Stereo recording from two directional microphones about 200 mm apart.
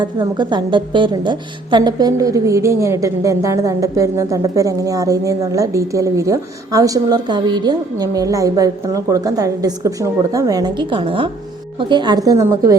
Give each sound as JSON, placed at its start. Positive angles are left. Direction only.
{"t": 0.0, "sound": "a woman's voice", "side_deg": -20}